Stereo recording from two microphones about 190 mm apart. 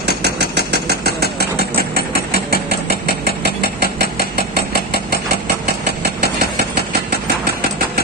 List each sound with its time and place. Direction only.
0.8 s engine: 55° right (ahead or behind)
4.7 s engine: 55° right (ahead or behind)
6.2 s engine: 60° right (ahead or behind)